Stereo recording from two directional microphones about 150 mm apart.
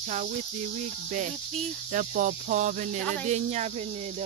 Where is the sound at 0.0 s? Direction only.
55° right (ahead or behind).